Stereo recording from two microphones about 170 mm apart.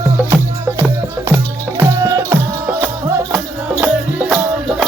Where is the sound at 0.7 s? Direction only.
15° right (ahead or behind).